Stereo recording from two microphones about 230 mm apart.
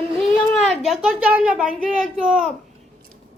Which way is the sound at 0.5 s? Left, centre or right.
Centre.